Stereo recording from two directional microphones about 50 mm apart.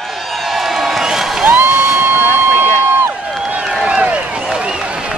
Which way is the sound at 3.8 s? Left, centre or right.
Right.